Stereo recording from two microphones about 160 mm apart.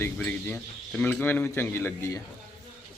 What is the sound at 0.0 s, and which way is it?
Speech, 10° left (ahead or behind).